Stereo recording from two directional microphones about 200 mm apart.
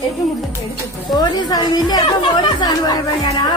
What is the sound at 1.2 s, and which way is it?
Speech, 20° left (ahead or behind).